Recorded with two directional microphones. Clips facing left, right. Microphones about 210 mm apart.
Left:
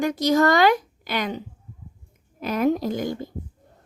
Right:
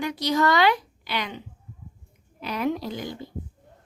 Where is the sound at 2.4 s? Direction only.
45° left (ahead or behind).